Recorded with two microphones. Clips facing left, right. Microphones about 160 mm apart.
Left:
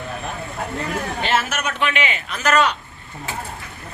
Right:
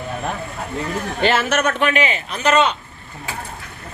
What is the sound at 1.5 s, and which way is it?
A man's voice, 45° right (ahead or behind).